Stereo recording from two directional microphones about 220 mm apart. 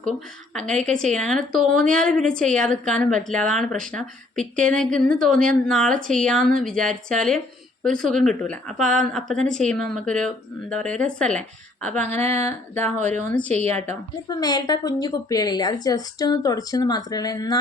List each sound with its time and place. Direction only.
0.5 s a woman's voice: 5° left (ahead or behind)
12.8 s speech: 30° right (ahead or behind)
14.3 s speech: 20° left (ahead or behind)